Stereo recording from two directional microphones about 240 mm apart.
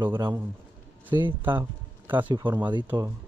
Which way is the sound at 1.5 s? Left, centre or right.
Centre.